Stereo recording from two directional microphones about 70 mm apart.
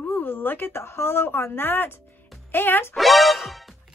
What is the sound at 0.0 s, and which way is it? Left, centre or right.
Speech, left.